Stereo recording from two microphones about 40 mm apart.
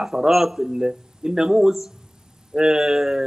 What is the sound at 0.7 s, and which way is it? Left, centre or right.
A man's voice, centre.